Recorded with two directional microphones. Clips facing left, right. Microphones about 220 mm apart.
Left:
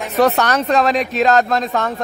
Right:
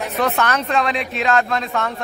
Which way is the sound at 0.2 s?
40° left (ahead or behind).